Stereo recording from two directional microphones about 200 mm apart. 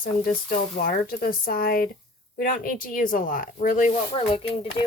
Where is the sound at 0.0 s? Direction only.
45° left (ahead or behind).